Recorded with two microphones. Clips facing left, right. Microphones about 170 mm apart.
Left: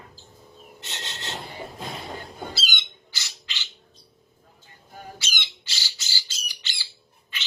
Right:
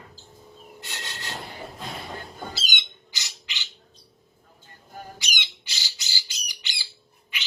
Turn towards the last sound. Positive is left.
turn(degrees=-15)  # may be behind; listen again after turning